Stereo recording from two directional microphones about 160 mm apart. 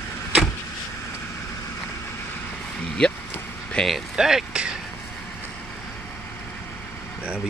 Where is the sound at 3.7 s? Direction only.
Centre (ahead or behind).